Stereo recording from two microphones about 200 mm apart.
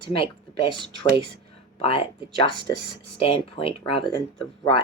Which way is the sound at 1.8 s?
30° left (ahead or behind).